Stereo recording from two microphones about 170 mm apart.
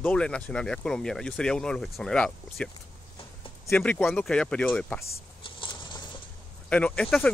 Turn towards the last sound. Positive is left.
turn(degrees=5)  # may be behind; listen again after turning